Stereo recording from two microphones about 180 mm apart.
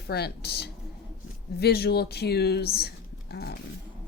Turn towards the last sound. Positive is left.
turn(degrees=65)  # may be behind; listen again after turning